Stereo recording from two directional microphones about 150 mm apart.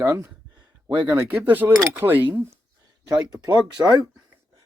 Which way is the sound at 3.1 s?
25° right (ahead or behind).